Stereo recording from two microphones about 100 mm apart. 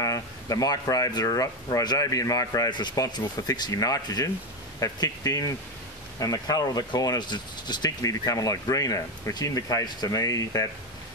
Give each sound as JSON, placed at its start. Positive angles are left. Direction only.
{"t": 0.0, "sound": "speech", "side_deg": 35}